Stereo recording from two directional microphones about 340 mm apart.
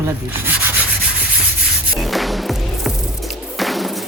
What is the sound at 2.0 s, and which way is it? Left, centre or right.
Music, centre.